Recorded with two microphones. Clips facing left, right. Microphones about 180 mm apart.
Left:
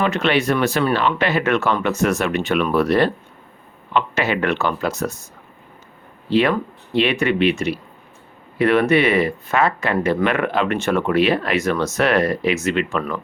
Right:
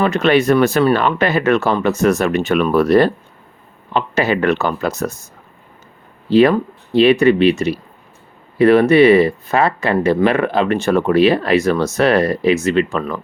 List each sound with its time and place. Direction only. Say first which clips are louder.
0.0 s speech: right 5 dB; 45° right (ahead or behind)
6.3 s speech: right 6 dB; 40° right (ahead or behind)